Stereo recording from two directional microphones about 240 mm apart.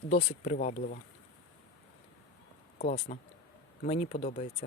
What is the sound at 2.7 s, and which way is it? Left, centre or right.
Speech, left.